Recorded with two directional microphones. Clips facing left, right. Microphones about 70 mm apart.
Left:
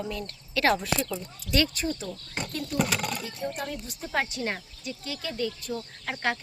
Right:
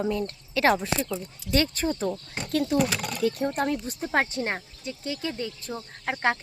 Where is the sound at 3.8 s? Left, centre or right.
Right.